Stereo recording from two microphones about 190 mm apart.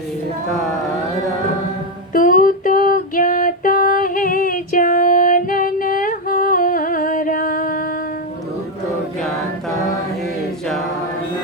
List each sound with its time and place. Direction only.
2.1 s music: 45° left (ahead or behind)